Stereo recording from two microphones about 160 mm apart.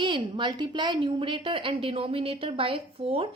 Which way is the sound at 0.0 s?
30° right (ahead or behind).